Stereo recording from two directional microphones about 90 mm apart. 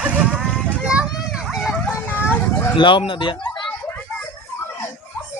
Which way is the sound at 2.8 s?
70° left (ahead or behind).